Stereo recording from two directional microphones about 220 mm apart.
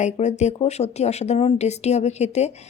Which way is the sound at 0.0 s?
30° left (ahead or behind).